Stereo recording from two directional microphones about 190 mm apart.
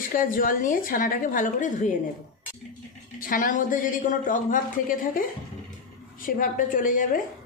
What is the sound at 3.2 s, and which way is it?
A woman's voice, 45° left (ahead or behind).